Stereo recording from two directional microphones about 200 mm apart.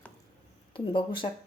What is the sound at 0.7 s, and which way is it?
Speech, 25° left (ahead or behind).